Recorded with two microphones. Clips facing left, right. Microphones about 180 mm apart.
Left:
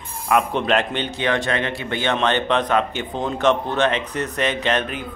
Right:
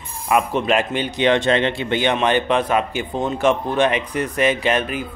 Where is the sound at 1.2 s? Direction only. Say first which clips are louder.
Right 6 dB; 25° right (ahead or behind).